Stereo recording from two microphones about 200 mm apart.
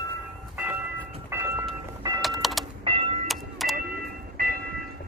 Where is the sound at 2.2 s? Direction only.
Centre (ahead or behind).